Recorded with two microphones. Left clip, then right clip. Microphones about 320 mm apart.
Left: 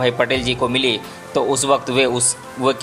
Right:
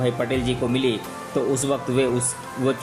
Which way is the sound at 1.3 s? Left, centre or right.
Left.